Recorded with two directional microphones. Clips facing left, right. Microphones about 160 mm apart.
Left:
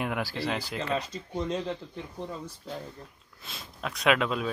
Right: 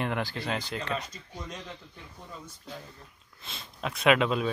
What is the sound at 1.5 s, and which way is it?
Speech, 30° left (ahead or behind).